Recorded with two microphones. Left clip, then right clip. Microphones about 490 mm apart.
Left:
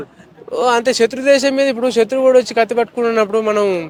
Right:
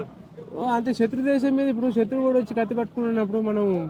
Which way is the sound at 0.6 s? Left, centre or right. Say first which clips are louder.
Left 10 dB; left.